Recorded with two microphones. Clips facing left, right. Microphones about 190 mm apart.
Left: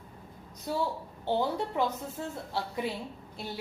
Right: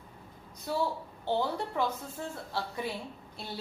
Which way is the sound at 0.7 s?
15° left (ahead or behind).